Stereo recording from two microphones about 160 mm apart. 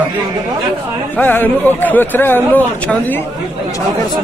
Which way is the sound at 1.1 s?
10° left (ahead or behind).